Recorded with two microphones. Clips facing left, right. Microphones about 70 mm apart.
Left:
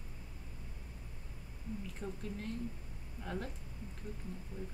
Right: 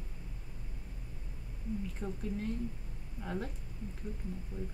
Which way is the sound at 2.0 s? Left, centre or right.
Centre.